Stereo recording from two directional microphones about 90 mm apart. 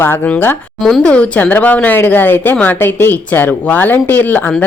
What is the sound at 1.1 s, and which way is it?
A woman's voice, 15° left (ahead or behind).